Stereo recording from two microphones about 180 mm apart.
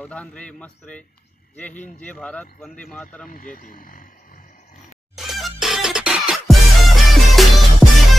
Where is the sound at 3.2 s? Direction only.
50° left (ahead or behind).